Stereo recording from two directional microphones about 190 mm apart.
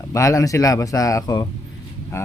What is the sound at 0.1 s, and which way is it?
Speech, 15° left (ahead or behind).